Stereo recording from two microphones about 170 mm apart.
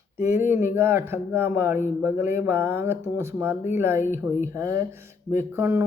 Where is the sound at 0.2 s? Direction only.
15° right (ahead or behind).